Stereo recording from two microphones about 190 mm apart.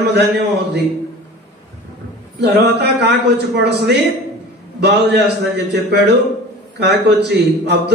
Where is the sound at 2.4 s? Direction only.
60° right (ahead or behind).